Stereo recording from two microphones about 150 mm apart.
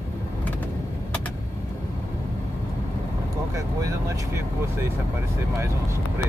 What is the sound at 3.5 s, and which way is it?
Speech, 20° right (ahead or behind).